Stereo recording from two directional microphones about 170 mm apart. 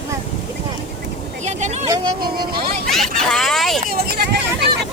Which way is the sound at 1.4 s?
45° right (ahead or behind).